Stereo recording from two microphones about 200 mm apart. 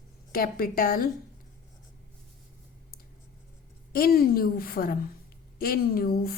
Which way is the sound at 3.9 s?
50° left (ahead or behind).